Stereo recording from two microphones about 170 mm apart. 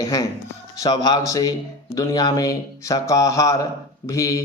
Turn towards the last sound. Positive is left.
turn(degrees=20)  # may be behind; listen again after turning